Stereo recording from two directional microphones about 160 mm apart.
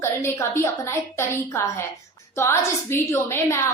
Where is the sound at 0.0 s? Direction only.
15° left (ahead or behind).